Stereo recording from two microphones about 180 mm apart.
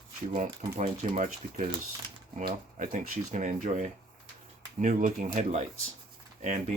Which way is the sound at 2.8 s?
45° right (ahead or behind).